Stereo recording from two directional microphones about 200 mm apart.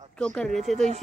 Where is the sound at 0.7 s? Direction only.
35° right (ahead or behind).